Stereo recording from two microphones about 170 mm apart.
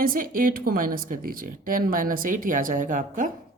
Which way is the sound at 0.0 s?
55° right (ahead or behind).